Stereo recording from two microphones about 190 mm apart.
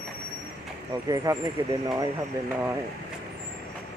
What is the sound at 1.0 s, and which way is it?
Speech, 20° right (ahead or behind).